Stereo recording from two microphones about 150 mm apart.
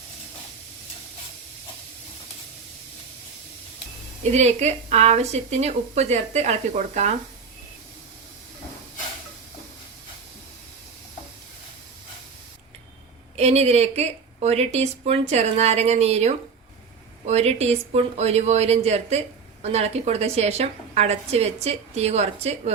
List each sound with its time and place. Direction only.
4.3 s a woman's voice: 50° right (ahead or behind)
13.3 s a woman's voice: 45° right (ahead or behind)